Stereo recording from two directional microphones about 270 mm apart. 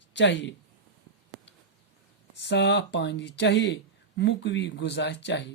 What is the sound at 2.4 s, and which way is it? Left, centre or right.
Speech, left.